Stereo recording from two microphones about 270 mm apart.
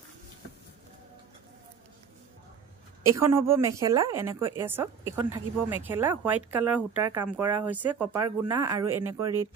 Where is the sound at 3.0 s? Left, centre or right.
Centre.